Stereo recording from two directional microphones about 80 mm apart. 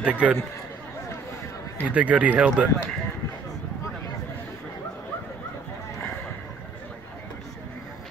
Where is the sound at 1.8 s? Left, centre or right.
Centre.